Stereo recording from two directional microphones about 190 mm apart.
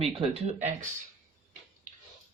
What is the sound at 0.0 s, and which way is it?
Speech, 30° right (ahead or behind).